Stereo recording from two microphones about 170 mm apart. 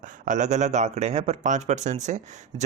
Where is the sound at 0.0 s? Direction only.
50° right (ahead or behind).